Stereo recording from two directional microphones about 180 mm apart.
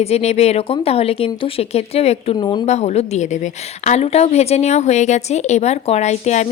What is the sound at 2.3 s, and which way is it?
Speech, 25° left (ahead or behind).